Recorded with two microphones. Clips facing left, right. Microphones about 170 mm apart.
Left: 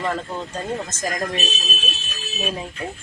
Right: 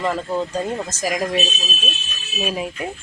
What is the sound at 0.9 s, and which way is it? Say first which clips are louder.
Speech: right 4 dB; 10° right (ahead or behind).